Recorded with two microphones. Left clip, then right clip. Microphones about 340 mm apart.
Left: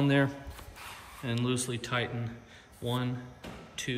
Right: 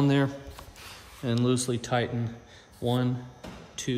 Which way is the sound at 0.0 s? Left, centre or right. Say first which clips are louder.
Right 2 dB; centre.